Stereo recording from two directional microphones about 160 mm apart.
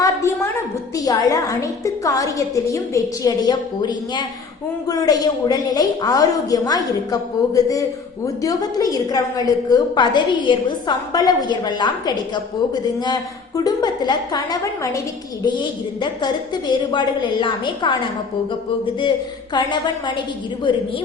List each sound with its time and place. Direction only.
0.0 s a sound: 20° left (ahead or behind)
0.9 s a woman's voice: 25° left (ahead or behind)
19.5 s a woman's voice: 25° left (ahead or behind)